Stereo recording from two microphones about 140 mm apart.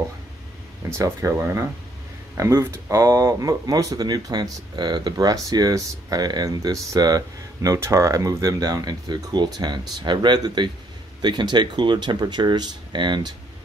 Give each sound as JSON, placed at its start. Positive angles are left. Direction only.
{"t": 0.8, "sound": "speech", "side_deg": -20}